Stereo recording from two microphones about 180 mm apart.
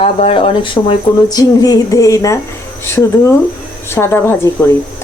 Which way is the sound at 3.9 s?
15° left (ahead or behind).